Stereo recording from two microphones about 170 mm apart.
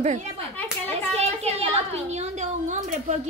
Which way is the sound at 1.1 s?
40° right (ahead or behind).